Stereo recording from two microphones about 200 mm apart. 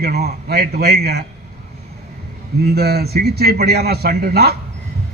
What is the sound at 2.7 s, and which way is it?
A man's voice, 55° right (ahead or behind).